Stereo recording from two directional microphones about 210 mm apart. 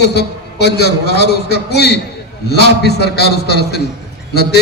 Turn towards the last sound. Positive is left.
turn(degrees=50)  # may be behind; listen again after turning